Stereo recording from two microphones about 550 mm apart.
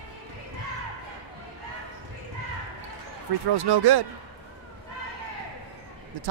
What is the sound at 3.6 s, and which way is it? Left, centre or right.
Speech, right.